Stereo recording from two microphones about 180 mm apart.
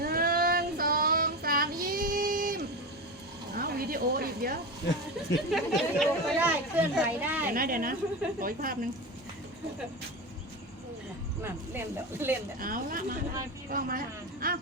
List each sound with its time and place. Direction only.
0.0 s child singing: 55° right (ahead or behind)
3.5 s a sound: 55° right (ahead or behind)
5.5 s speech: centre (ahead or behind)
7.5 s a woman's voice: 50° right (ahead or behind)
12.2 s speech: 10° right (ahead or behind)
12.5 s a woman's voice: 50° right (ahead or behind)